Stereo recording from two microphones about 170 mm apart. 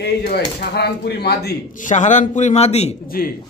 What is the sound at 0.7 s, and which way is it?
Speech, 75° left (ahead or behind).